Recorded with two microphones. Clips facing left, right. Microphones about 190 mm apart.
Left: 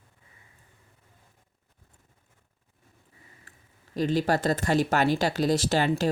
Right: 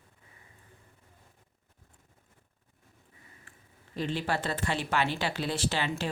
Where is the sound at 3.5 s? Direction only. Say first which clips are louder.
Even; 40° left (ahead or behind).